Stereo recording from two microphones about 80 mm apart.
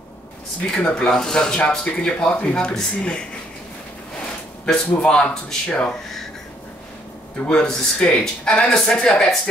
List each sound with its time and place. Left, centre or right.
0.7 s speech: centre
4.6 s speech: centre
7.4 s speech: centre